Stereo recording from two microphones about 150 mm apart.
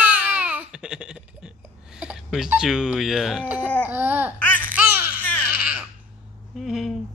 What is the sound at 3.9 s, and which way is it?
Laughter, 10° right (ahead or behind).